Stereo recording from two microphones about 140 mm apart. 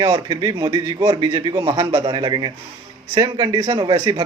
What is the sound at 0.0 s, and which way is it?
A man's voice, 30° right (ahead or behind).